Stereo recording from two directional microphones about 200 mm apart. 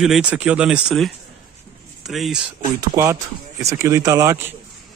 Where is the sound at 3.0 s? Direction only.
15° right (ahead or behind).